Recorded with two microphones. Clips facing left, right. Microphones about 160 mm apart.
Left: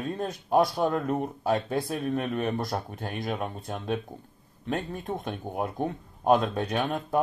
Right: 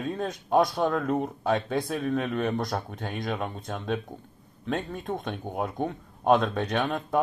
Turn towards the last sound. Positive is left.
turn(degrees=0)  # may be behind; listen again after turning